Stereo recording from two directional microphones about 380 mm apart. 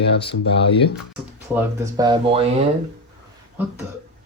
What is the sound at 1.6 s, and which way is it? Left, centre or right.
Speech, centre.